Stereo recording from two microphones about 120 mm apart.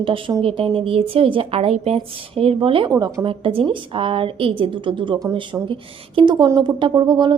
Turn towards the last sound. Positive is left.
turn(degrees=-40)  # may be behind; listen again after turning